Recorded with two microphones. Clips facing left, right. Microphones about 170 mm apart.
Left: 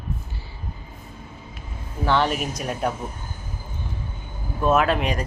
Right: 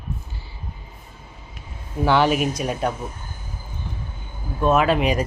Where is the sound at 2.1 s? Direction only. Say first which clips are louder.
Right 4 dB; 5° right (ahead or behind).